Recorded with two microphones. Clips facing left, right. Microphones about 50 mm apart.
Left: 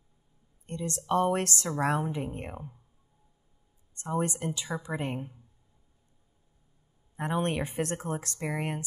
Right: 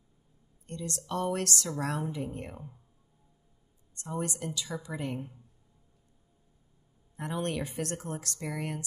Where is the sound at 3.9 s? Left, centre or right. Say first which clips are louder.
Left 5 dB; left.